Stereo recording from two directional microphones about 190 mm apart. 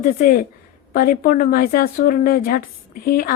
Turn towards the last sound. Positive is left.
turn(degrees=50)  # may be behind; listen again after turning